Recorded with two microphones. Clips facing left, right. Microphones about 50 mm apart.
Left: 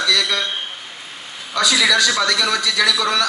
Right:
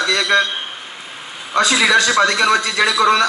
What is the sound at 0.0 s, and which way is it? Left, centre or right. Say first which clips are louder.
Speech: right 4 dB; right.